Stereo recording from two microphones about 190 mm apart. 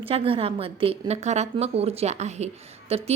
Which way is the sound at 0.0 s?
30° right (ahead or behind).